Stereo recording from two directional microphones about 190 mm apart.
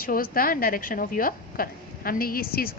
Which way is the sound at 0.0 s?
50° left (ahead or behind).